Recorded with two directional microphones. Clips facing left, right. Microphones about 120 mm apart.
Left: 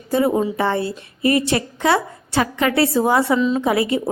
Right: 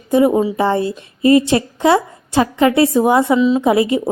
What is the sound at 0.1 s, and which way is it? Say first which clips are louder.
A woman's voice: right 5 dB; 20° right (ahead or behind).